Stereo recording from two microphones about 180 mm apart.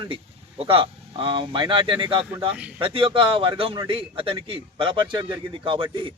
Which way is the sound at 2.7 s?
30° right (ahead or behind).